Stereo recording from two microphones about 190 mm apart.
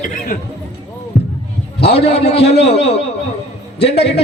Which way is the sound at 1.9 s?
30° left (ahead or behind).